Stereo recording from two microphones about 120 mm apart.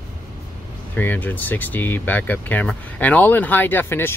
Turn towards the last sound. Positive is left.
turn(degrees=20)  # may be behind; listen again after turning